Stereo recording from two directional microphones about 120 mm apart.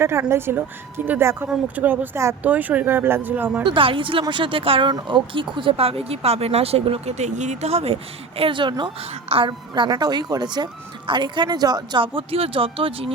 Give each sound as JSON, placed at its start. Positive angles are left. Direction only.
{"t": 0.0, "sound": "speech", "side_deg": -20}
{"t": 3.6, "sound": "speech", "side_deg": -45}
{"t": 4.9, "sound": "speech", "side_deg": -40}
{"t": 8.4, "sound": "a woman's voice", "side_deg": -45}